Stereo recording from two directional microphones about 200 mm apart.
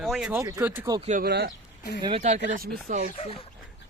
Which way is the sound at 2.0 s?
30° right (ahead or behind).